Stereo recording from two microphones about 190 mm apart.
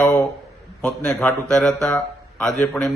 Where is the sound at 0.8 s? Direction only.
5° left (ahead or behind).